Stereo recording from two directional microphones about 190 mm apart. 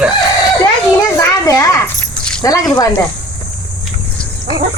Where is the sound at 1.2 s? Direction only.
15° left (ahead or behind).